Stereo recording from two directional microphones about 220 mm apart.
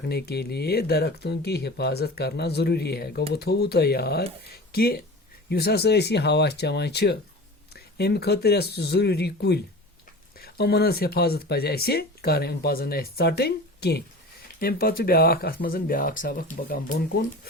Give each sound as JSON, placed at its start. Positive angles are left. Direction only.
{"t": 0.1, "sound": "speech", "side_deg": 45}